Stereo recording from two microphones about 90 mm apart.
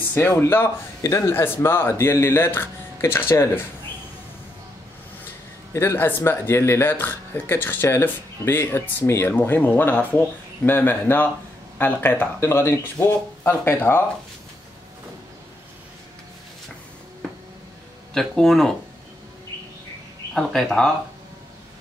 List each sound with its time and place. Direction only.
0.1 s speech: 25° left (ahead or behind)
1.0 s a man's voice: 35° left (ahead or behind)
1.3 s speech: 25° left (ahead or behind)
5.7 s speech: 30° left (ahead or behind)
18.1 s speech: 5° left (ahead or behind)
20.3 s speech: 5° left (ahead or behind)